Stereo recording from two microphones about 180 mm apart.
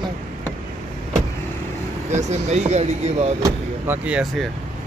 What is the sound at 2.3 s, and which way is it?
Speech, 40° right (ahead or behind).